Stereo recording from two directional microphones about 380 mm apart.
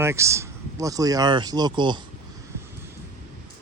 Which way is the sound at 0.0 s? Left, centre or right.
Centre.